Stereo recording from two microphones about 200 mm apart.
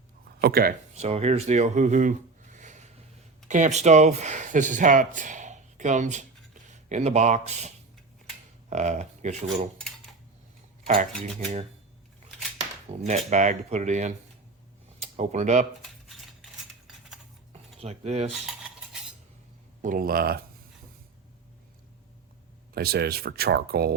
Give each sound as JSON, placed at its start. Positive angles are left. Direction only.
{"t": 0.4, "sound": "speech", "side_deg": -50}
{"t": 0.9, "sound": "speech", "side_deg": -30}
{"t": 8.7, "sound": "speech", "side_deg": -35}
{"t": 9.7, "sound": "a sound", "side_deg": 5}
{"t": 10.8, "sound": "speech", "side_deg": -40}
{"t": 13.0, "sound": "speech", "side_deg": -35}
{"t": 16.0, "sound": "a sound", "side_deg": 0}
{"t": 17.5, "sound": "cutlery", "side_deg": -30}
{"t": 19.8, "sound": "speech", "side_deg": -45}
{"t": 22.7, "sound": "speech", "side_deg": -50}